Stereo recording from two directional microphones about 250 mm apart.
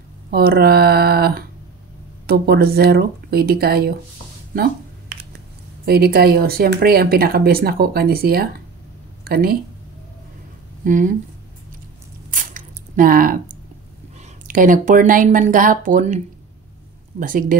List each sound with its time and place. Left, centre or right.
0.3 s speech: right
5.9 s speech: right
10.8 s speech: right
12.3 s a sound: right
14.5 s speech: right
17.2 s speech: right